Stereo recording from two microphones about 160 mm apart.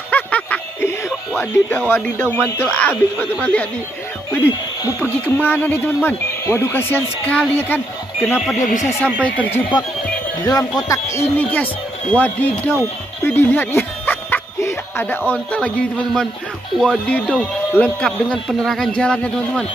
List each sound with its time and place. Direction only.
0.1 s a sound: 10° left (ahead or behind)
2.3 s speech: 15° left (ahead or behind)
8.2 s speech: 5° right (ahead or behind)
8.5 s speech: 50° left (ahead or behind)
8.8 s speech: 10° left (ahead or behind)
10.9 s a sound: 20° left (ahead or behind)
11.3 s speech: 10° left (ahead or behind)
16.8 s speech: 5° left (ahead or behind)